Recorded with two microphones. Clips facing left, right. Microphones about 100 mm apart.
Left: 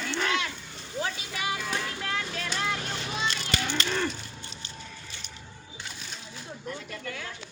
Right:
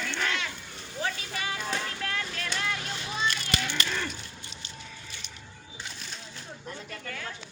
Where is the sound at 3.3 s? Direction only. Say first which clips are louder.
Left 1 dB; 30° left (ahead or behind).